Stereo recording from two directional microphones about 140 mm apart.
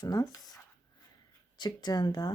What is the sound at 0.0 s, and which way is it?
Speech, 25° left (ahead or behind).